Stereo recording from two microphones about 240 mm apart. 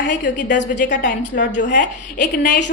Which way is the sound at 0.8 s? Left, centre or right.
Left.